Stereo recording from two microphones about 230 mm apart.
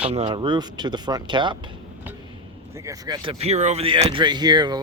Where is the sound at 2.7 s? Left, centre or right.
Centre.